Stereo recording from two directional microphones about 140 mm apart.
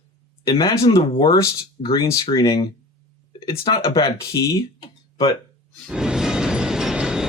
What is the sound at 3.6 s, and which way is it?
Speech, 40° left (ahead or behind).